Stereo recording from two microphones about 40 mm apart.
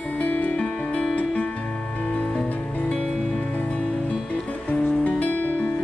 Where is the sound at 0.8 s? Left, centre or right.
Left.